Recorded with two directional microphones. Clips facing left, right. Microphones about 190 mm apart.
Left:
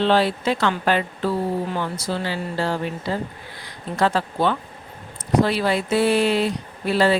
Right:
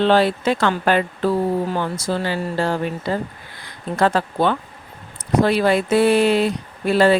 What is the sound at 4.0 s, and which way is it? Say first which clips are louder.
Speech: right 2 dB; 50° right (ahead or behind).